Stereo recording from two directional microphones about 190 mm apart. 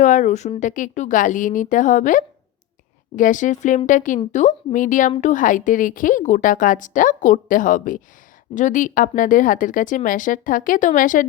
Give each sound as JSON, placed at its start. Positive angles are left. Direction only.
{"t": 0.0, "sound": "a woman's voice", "side_deg": 40}